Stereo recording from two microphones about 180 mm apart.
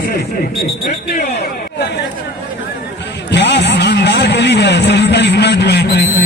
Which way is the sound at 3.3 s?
75° left (ahead or behind).